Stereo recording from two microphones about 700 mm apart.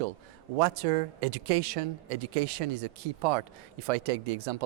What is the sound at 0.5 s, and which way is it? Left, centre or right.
Speech, right.